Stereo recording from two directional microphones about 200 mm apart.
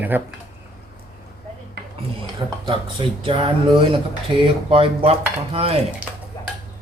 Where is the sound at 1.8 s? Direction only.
55° right (ahead or behind).